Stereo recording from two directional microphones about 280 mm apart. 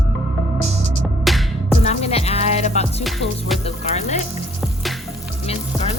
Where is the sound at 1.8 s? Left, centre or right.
Left.